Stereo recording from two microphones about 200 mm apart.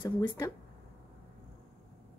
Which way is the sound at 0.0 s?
25° left (ahead or behind).